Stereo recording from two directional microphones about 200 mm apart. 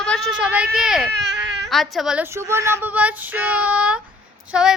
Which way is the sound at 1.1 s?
55° right (ahead or behind).